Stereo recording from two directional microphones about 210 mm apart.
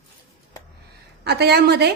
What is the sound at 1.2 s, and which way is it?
Speech, 50° right (ahead or behind).